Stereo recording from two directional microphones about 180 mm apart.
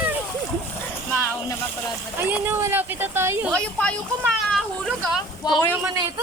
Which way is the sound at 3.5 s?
5° left (ahead or behind).